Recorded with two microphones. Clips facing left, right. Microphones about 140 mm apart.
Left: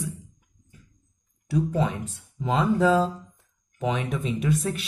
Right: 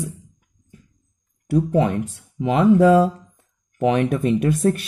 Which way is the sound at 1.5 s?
65° right (ahead or behind).